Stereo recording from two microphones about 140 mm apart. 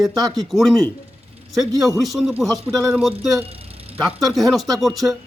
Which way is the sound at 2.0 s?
Centre (ahead or behind).